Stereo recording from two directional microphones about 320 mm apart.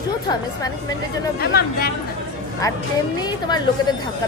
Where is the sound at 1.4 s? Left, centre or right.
Left.